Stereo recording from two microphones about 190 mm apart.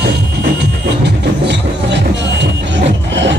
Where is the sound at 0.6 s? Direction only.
65° right (ahead or behind).